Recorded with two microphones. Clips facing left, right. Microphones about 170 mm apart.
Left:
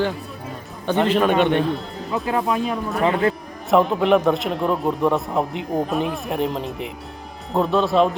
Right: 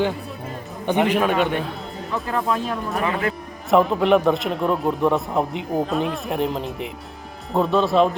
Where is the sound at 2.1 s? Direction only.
15° left (ahead or behind).